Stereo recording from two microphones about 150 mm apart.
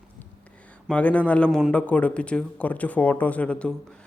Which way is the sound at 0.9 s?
10° left (ahead or behind).